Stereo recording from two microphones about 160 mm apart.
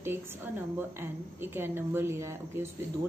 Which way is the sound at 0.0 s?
15° right (ahead or behind).